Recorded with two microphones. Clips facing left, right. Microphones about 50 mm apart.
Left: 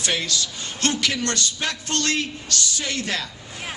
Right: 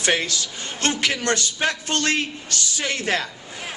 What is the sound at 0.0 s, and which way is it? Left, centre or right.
A man's voice, right.